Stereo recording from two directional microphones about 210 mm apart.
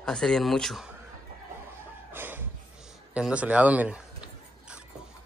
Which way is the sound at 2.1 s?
10° right (ahead or behind).